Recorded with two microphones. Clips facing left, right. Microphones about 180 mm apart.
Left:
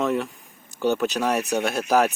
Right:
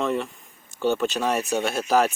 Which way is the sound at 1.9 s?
15° left (ahead or behind).